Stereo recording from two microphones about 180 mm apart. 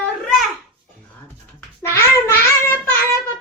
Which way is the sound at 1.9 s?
15° left (ahead or behind).